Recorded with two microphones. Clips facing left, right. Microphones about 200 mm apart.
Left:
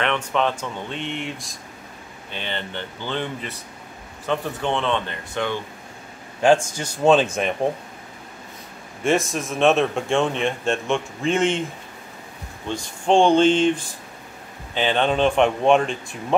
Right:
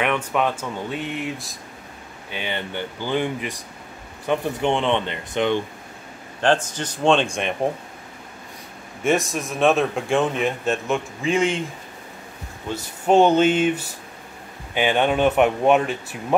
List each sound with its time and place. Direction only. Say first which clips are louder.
0.0 s speech: even; 10° right (ahead or behind)
6.4 s speech: left 3 dB; 10° left (ahead or behind)
9.0 s a man's voice: even; centre (ahead or behind)
12.6 s speech: right 1 dB; 5° right (ahead or behind)